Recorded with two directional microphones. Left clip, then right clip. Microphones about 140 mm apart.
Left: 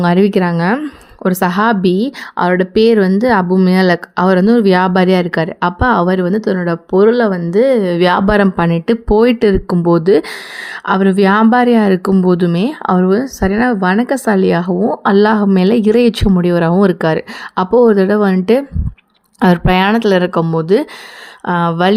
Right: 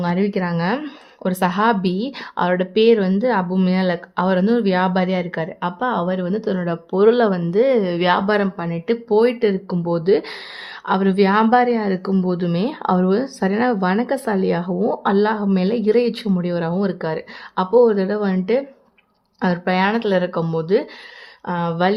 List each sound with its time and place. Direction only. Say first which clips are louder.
0.0 s speech: left 9 dB; 35° left (ahead or behind)
0.5 s a woman's voice: left 6 dB; 20° left (ahead or behind)
7.9 s speech: left 6 dB; 30° left (ahead or behind)
8.3 s speech: left 8 dB; 45° left (ahead or behind)
10.8 s a woman's voice: left 5 dB; 25° left (ahead or behind)
12.5 s a woman's voice: left 5 dB; 20° left (ahead or behind)